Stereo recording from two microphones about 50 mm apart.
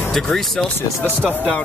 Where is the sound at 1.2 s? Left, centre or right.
Left.